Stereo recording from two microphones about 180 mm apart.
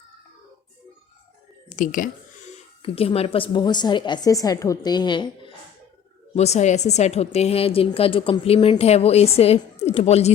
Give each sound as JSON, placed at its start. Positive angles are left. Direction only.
{"t": 1.7, "sound": "speech", "side_deg": 45}
{"t": 2.8, "sound": "a woman's voice", "side_deg": 35}
{"t": 6.3, "sound": "a woman's voice", "side_deg": 35}